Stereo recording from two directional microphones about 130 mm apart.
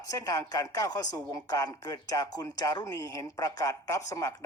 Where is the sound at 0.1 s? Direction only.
25° left (ahead or behind).